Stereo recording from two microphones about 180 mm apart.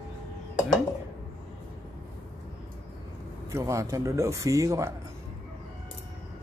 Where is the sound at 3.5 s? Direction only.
15° right (ahead or behind).